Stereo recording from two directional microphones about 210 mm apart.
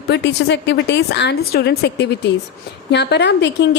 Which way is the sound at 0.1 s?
55° left (ahead or behind).